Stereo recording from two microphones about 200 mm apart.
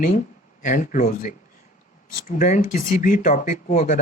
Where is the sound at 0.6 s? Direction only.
40° left (ahead or behind).